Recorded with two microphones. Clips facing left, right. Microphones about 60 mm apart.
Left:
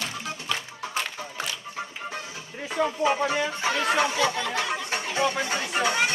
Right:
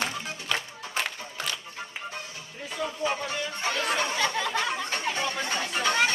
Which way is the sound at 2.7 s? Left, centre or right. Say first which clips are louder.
Left 6 dB; left.